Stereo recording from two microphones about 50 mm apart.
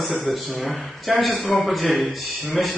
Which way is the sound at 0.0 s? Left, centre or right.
Centre.